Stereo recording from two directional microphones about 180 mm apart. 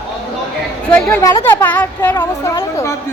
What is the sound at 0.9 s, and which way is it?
A woman's voice, 5° left (ahead or behind).